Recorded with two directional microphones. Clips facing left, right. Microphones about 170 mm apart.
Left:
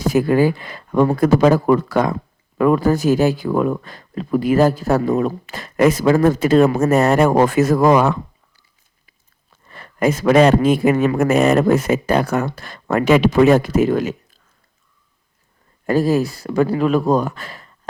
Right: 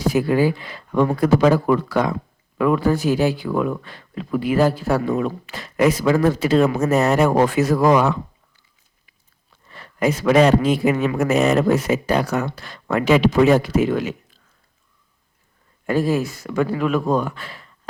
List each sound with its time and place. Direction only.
0.0 s speech: 45° left (ahead or behind)
9.6 s speech: 50° left (ahead or behind)
15.9 s speech: 40° left (ahead or behind)